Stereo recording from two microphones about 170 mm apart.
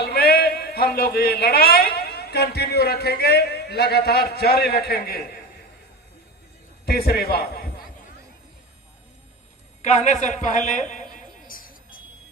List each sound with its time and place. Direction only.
0.0 s a man's voice: 70° left (ahead or behind)
6.8 s a man's voice: 65° left (ahead or behind)
9.8 s a woman's voice: 45° left (ahead or behind)
11.4 s vehicle: 55° left (ahead or behind)